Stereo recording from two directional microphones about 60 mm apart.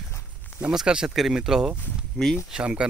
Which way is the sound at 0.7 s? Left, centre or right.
Centre.